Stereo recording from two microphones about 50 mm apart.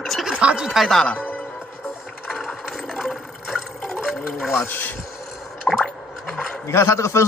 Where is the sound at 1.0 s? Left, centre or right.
Left.